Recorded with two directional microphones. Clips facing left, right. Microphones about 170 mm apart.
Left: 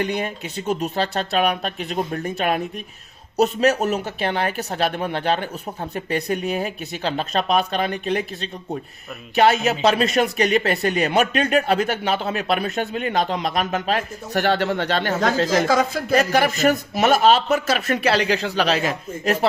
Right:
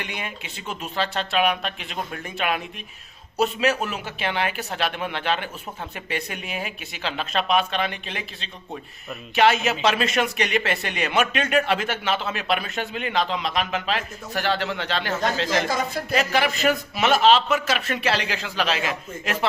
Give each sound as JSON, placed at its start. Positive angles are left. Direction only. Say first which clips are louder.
{"t": 0.0, "sound": "speech", "louder": "left 9 dB", "side_deg": 40}
{"t": 15.6, "sound": "speech", "louder": "left 6 dB", "side_deg": 90}
{"t": 16.1, "sound": "speech", "louder": "left 5 dB", "side_deg": 45}